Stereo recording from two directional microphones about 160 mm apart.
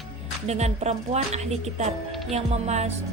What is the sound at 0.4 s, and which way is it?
A woman's voice, 45° right (ahead or behind).